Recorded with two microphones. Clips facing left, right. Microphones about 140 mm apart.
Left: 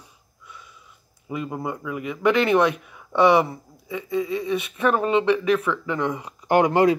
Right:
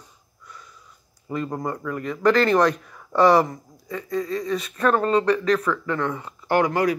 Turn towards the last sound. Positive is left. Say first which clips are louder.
# left 3 dB
turn(degrees=25)  # may be behind; listen again after turning